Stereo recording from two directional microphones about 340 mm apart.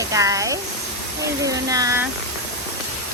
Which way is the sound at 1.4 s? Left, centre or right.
Centre.